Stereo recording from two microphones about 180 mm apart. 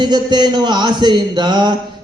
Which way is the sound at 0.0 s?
25° right (ahead or behind).